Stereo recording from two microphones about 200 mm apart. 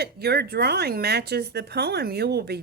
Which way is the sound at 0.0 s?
55° right (ahead or behind).